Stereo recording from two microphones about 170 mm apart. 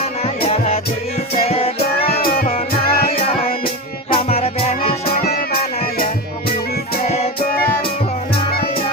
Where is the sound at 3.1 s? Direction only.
35° left (ahead or behind).